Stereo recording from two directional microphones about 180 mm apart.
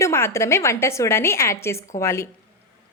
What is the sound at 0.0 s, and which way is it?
A woman's voice, 15° left (ahead or behind).